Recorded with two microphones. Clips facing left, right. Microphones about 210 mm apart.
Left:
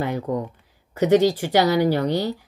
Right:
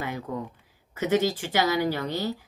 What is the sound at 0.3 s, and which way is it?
Speech, 40° left (ahead or behind).